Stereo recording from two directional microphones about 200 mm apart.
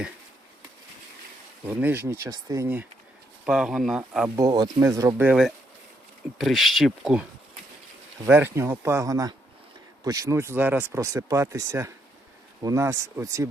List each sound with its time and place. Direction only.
1.6 s speech: 10° right (ahead or behind)
4.4 s speech: 20° right (ahead or behind); by 7.3 s 5° right (ahead or behind)
8.3 s speech: 10° right (ahead or behind)